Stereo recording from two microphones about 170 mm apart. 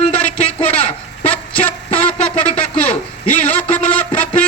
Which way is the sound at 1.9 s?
10° left (ahead or behind).